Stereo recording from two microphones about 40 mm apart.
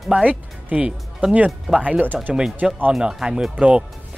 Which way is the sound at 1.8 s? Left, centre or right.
Right.